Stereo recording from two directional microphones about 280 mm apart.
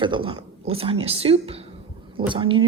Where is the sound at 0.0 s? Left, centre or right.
Centre.